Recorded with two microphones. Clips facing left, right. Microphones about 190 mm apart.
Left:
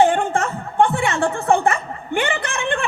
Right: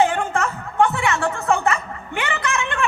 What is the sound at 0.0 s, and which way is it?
Music, 30° left (ahead or behind).